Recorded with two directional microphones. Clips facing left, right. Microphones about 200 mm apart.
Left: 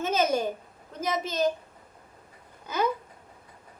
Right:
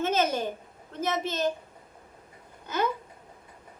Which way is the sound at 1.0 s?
10° left (ahead or behind).